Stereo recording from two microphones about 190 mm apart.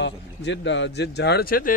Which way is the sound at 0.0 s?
70° left (ahead or behind).